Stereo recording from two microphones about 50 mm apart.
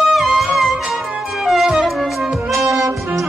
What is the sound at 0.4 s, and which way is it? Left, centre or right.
Music, centre.